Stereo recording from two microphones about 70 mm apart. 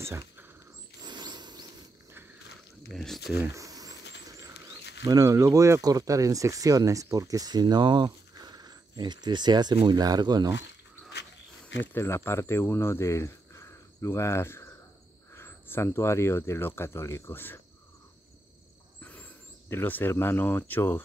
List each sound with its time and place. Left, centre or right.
1.0 s a sound: right
2.9 s speech: centre
3.5 s a sound: right
5.2 s speech: right
9.8 s speech: right
11.9 s speech: left
18.9 s speech: left